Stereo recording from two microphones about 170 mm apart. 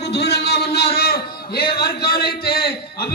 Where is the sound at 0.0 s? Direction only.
75° left (ahead or behind).